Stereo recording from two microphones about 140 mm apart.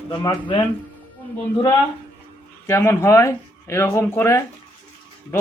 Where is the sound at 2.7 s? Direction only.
20° left (ahead or behind).